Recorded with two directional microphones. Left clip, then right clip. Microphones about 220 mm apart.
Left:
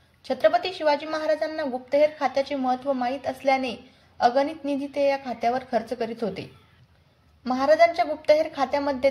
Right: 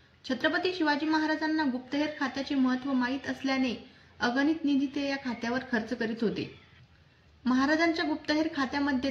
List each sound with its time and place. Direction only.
0.2 s a woman's voice: 25° left (ahead or behind)
7.4 s a woman's voice: 25° left (ahead or behind)